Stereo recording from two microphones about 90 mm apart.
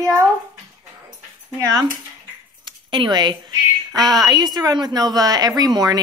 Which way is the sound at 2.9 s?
60° right (ahead or behind).